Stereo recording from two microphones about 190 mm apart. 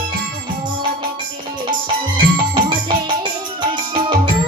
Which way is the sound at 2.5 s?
25° right (ahead or behind).